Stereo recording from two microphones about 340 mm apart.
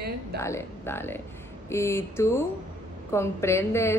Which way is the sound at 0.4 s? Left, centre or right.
Centre.